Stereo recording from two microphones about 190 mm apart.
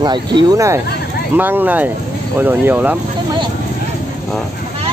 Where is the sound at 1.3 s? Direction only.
10° right (ahead or behind).